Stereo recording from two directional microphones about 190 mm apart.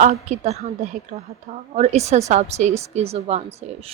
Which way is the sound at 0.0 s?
35° right (ahead or behind).